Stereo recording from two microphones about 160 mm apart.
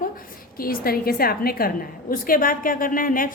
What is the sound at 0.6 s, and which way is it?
A woman's voice, 65° left (ahead or behind).